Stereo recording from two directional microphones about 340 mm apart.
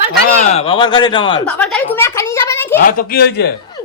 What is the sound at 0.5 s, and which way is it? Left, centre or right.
Speech, centre.